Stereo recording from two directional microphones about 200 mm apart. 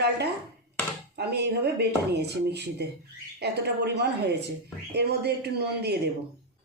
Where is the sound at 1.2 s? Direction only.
55° right (ahead or behind).